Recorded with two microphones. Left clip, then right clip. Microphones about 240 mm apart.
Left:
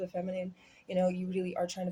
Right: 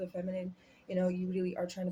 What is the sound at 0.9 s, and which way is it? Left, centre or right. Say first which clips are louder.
Speech: left 3 dB; left.